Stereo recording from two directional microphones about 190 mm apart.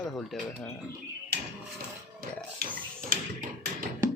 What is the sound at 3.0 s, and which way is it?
Tap, 45° right (ahead or behind).